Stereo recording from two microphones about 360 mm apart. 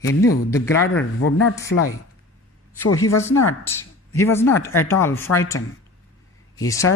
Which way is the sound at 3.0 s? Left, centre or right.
Centre.